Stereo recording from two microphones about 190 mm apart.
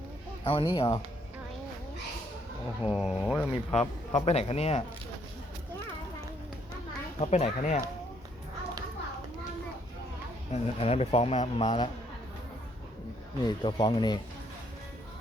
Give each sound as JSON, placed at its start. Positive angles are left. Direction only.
{"t": 0.4, "sound": "speech", "side_deg": 25}
{"t": 2.9, "sound": "speech", "side_deg": -5}
{"t": 3.5, "sound": "speech", "side_deg": 35}
{"t": 7.2, "sound": "speech", "side_deg": 35}
{"t": 10.5, "sound": "speech", "side_deg": 30}
{"t": 13.4, "sound": "speech", "side_deg": 25}